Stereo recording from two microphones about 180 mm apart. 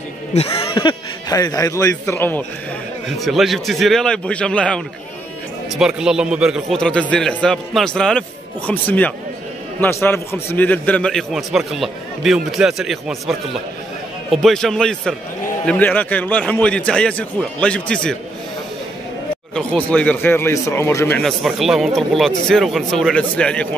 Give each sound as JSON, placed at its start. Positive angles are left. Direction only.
{"t": 0.3, "sound": "speech", "side_deg": 30}
{"t": 3.1, "sound": "a man's voice", "side_deg": 0}
{"t": 19.5, "sound": "speech", "side_deg": 5}